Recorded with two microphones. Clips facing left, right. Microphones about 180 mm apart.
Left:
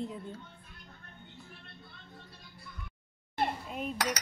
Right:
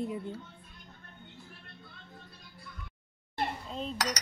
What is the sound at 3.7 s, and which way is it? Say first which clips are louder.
Cutlery: even; 10° left (ahead or behind).